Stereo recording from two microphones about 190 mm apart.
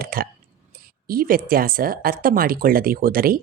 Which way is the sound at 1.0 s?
50° right (ahead or behind).